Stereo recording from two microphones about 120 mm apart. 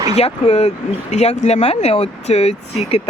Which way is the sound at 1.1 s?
70° left (ahead or behind).